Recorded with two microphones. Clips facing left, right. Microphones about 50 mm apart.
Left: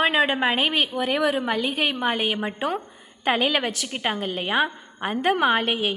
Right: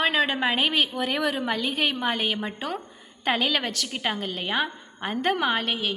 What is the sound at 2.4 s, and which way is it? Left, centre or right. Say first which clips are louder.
Speech: left 5 dB; left.